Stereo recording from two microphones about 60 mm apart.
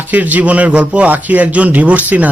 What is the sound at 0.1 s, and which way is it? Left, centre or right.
Speech, right.